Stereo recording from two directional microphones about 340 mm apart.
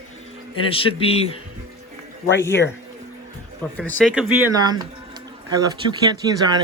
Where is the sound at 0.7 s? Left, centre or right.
Centre.